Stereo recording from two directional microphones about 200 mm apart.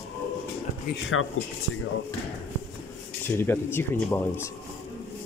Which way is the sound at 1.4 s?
90° left.